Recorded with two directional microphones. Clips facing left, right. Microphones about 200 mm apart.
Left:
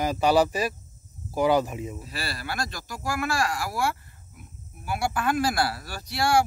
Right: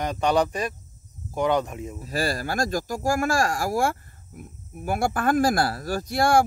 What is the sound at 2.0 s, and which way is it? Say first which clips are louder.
Speech: right 8 dB; 45° right (ahead or behind).